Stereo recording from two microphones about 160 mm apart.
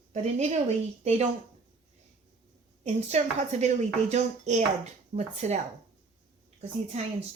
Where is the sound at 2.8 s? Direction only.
45° right (ahead or behind).